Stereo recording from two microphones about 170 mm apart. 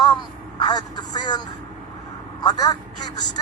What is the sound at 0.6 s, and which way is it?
Speech, 25° left (ahead or behind).